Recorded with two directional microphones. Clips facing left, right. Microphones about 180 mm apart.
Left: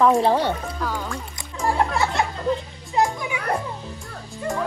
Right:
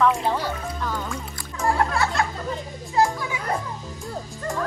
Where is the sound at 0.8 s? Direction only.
10° left (ahead or behind).